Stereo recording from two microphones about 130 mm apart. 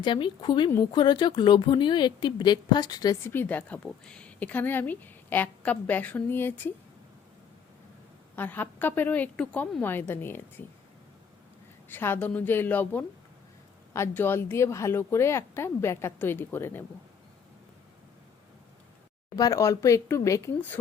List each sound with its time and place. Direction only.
0.0 s speech: 35° left (ahead or behind)
3.2 s a woman's voice: 15° left (ahead or behind)
8.4 s a woman's voice: 15° left (ahead or behind)
11.9 s a woman's voice: 15° left (ahead or behind)
19.4 s a woman's voice: 25° left (ahead or behind)